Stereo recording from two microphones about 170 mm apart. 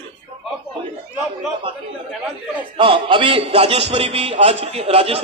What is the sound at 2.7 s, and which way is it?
A man's voice, 30° right (ahead or behind).